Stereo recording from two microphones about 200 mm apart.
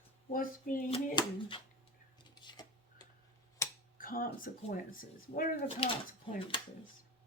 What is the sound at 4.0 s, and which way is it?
Speech, 45° left (ahead or behind).